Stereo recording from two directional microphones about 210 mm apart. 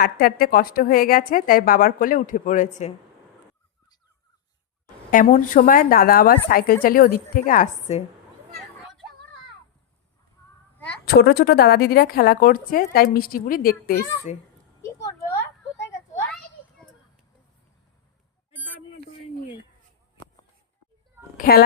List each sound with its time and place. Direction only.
0.0 s a woman's voice: 45° left (ahead or behind)
5.1 s a woman's voice: 40° left (ahead or behind)
8.5 s a sound: centre (ahead or behind)
11.0 s a woman's voice: 45° left (ahead or behind)
14.8 s a sound: 15° left (ahead or behind)
21.3 s a child's voice: 45° left (ahead or behind)